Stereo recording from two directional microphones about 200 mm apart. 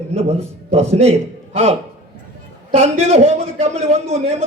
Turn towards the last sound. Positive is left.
turn(degrees=-30)  # may be behind; listen again after turning